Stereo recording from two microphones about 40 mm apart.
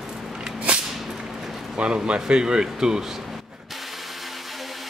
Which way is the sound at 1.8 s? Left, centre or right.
Right.